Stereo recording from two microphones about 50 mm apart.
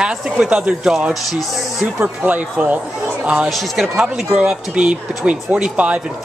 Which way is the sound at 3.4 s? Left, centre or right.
Centre.